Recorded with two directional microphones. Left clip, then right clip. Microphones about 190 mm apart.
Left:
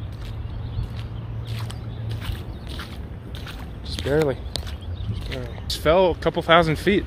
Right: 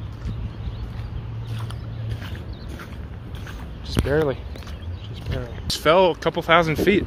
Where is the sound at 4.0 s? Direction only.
5° left (ahead or behind).